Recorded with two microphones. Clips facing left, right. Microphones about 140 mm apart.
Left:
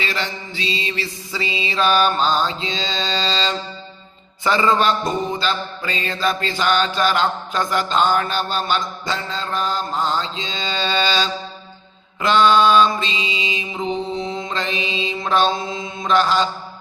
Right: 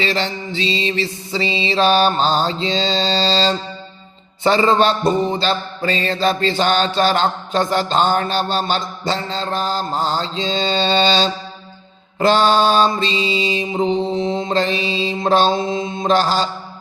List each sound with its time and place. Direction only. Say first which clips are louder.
0.0 s mantra: right 5 dB; 30° right (ahead or behind)